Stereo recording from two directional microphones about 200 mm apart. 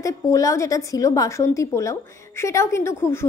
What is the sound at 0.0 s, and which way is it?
A woman's voice, 15° left (ahead or behind).